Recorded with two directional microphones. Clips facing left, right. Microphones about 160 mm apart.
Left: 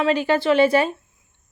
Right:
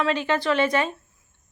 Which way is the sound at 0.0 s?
35° left (ahead or behind).